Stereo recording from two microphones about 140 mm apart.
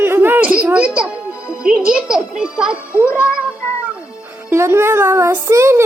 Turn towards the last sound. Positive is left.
turn(degrees=-20)  # may be behind; listen again after turning